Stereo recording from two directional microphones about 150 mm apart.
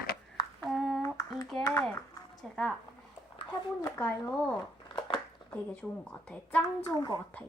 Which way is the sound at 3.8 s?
20° left (ahead or behind).